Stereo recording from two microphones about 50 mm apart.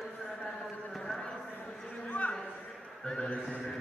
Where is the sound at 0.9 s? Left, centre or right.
Centre.